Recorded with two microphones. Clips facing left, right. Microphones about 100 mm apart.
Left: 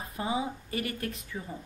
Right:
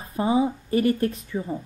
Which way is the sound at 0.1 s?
30° right (ahead or behind).